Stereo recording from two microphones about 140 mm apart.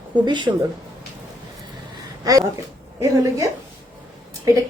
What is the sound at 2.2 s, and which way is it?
A woman's voice, 25° right (ahead or behind).